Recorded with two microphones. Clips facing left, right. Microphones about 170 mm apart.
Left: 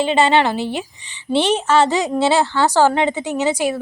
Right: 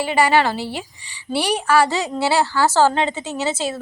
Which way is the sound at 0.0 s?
20° left (ahead or behind).